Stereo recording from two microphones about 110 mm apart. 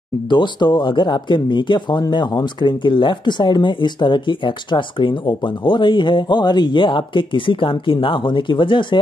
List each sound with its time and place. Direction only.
0.3 s speech: 45° left (ahead or behind)